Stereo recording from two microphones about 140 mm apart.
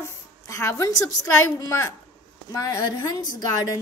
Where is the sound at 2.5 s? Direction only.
25° left (ahead or behind).